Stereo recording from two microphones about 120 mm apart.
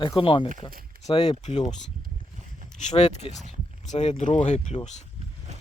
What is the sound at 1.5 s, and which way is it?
Speech, 60° left (ahead or behind).